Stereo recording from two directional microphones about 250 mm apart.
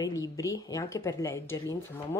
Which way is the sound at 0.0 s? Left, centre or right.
Centre.